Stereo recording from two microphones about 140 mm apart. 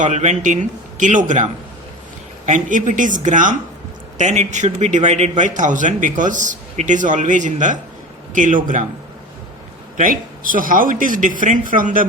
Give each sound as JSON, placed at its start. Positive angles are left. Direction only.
{"t": 0.0, "sound": "a man's voice", "side_deg": -55}
{"t": 2.5, "sound": "a man's voice", "side_deg": -65}
{"t": 10.0, "sound": "speech", "side_deg": -80}